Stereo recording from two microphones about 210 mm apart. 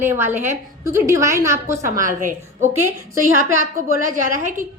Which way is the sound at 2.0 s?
40° right (ahead or behind).